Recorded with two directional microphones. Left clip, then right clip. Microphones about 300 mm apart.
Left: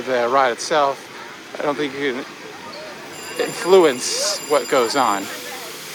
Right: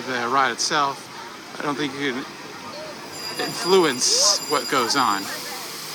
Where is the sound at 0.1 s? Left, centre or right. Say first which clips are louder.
Left 4 dB; centre.